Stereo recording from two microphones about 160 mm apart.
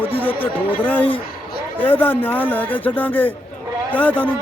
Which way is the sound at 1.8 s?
10° left (ahead or behind).